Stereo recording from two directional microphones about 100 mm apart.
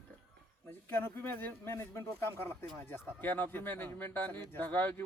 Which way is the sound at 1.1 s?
20° left (ahead or behind).